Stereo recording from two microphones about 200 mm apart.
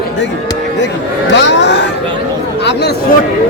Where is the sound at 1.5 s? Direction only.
60° left (ahead or behind).